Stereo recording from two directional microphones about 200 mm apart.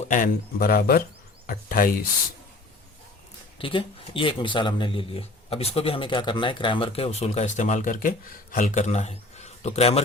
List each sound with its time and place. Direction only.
0.0 s speech: 40° left (ahead or behind)
3.6 s speech: 25° left (ahead or behind)